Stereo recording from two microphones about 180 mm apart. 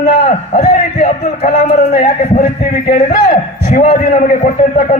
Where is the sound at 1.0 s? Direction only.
40° left (ahead or behind).